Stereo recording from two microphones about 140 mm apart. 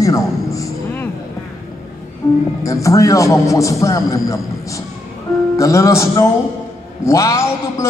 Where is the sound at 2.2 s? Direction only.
25° left (ahead or behind).